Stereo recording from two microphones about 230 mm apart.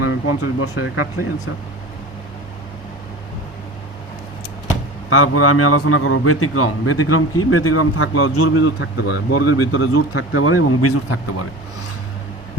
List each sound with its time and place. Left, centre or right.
0.0 s speech: left
5.0 s a man's voice: left
9.3 s a man's voice: left